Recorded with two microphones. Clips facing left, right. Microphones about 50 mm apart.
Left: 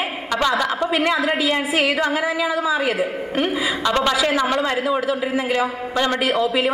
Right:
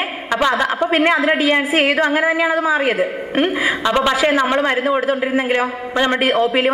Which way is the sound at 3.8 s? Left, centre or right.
Right.